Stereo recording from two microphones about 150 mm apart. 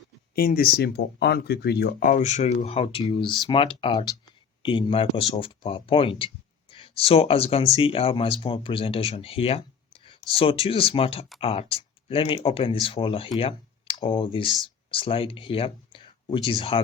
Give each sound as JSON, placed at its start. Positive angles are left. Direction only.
{"t": 0.3, "sound": "speech", "side_deg": 80}